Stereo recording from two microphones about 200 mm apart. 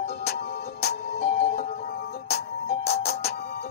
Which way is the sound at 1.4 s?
45° left (ahead or behind).